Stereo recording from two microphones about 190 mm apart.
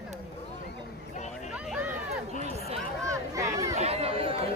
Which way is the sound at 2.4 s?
35° right (ahead or behind).